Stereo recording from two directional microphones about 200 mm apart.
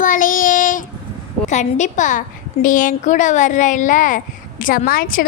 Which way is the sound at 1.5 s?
35° left (ahead or behind).